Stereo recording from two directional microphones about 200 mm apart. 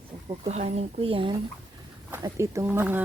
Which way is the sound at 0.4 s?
35° right (ahead or behind).